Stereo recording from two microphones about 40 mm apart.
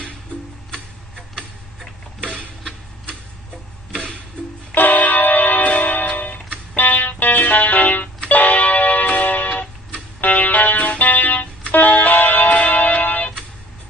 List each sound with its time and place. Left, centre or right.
0.7 s music: centre
4.7 s music: left
8.3 s clock: left
10.2 s music: left